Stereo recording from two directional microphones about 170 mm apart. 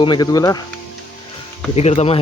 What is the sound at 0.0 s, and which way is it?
Speech, 25° left (ahead or behind).